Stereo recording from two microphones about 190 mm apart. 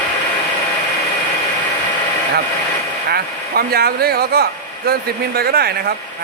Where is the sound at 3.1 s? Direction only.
55° right (ahead or behind).